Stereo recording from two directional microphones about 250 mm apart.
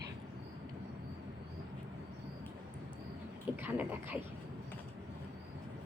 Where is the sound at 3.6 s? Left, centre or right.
Centre.